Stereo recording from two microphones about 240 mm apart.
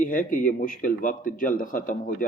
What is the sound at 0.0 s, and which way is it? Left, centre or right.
A man's voice, left.